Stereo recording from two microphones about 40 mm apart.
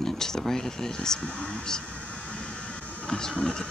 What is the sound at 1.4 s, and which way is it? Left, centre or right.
Speech, left.